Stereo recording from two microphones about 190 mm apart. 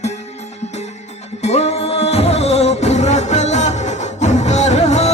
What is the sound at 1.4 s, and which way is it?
Music, 35° left (ahead or behind).